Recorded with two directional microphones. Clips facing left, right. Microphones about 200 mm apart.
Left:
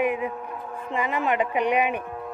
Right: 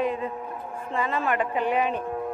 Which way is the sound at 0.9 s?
15° left (ahead or behind).